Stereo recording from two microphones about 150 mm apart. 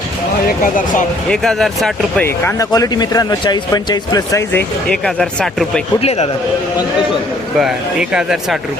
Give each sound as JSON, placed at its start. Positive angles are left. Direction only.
{"t": 1.3, "sound": "speech", "side_deg": 0}
{"t": 2.2, "sound": "speech", "side_deg": 15}
{"t": 4.9, "sound": "speech", "side_deg": 5}
{"t": 6.0, "sound": "a man's voice", "side_deg": 45}
{"t": 8.1, "sound": "speech", "side_deg": -5}